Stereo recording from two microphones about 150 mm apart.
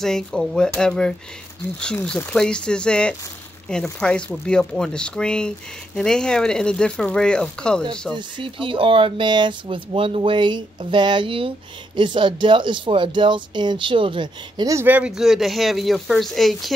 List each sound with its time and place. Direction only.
0.0 s speech: 5° left (ahead or behind)
8.1 s speech: 35° right (ahead or behind); by 16.7 s centre (ahead or behind)